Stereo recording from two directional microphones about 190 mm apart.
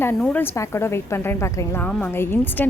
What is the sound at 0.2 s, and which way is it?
A woman's voice, 10° left (ahead or behind).